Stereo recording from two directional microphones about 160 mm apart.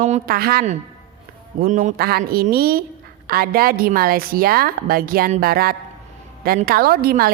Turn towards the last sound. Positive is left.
turn(degrees=-70)  # may be behind; listen again after turning